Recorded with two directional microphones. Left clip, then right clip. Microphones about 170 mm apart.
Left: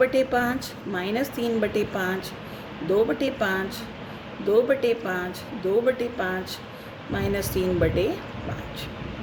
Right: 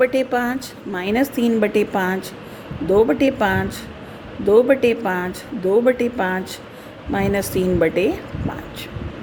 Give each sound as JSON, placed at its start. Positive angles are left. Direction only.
{"t": 0.0, "sound": "a woman's voice", "side_deg": -50}